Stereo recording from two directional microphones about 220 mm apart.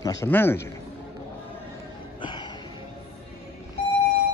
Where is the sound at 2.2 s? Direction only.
20° left (ahead or behind).